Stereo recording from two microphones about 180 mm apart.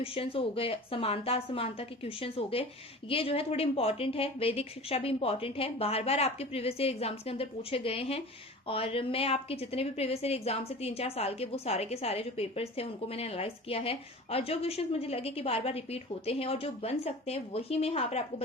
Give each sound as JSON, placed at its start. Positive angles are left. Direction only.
{"t": 0.0, "sound": "a woman's voice", "side_deg": 30}